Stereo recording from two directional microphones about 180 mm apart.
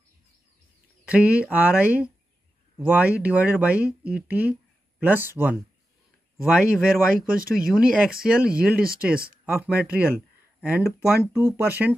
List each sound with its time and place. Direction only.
1.0 s speech: 5° right (ahead or behind)
8.8 s speech: 55° right (ahead or behind)
9.7 s speech: 10° right (ahead or behind)